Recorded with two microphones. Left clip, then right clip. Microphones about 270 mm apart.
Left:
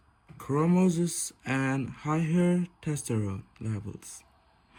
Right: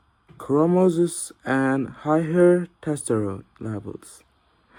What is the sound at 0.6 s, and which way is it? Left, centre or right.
Speech, left.